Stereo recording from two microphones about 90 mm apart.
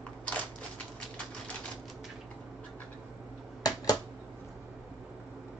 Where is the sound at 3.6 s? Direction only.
45° left (ahead or behind).